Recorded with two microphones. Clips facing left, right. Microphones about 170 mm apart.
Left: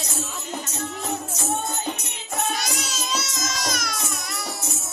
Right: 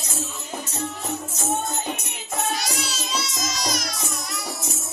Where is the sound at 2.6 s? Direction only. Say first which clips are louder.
Right 1 dB; 45° left (ahead or behind).